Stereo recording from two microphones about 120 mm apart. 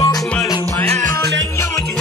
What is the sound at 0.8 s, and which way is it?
Music, 65° right (ahead or behind).